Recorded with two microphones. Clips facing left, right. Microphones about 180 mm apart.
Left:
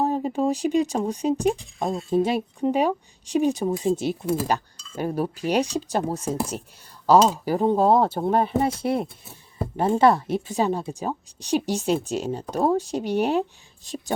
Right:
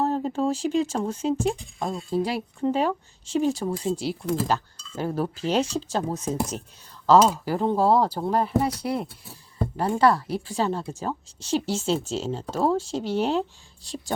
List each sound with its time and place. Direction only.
0.0 s speech: 10° left (ahead or behind)